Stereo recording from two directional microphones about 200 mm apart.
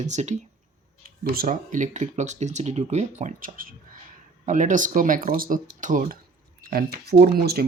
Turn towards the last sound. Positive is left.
turn(degrees=-50)  # may be behind; listen again after turning